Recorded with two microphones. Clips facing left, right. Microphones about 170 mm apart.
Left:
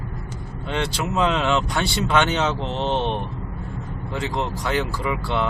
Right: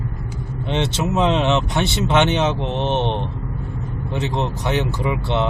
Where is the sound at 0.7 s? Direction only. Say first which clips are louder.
Right 3 dB; 25° right (ahead or behind).